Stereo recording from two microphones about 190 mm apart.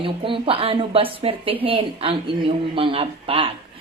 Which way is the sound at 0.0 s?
30° right (ahead or behind).